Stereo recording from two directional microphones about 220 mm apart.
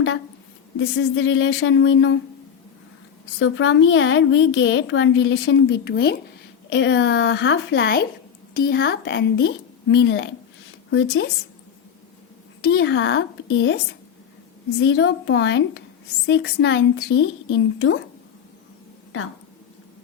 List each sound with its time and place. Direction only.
0.8 s a woman's voice: 55° left (ahead or behind)
3.3 s a woman's voice: 60° left (ahead or behind)
12.6 s a woman's voice: 50° left (ahead or behind)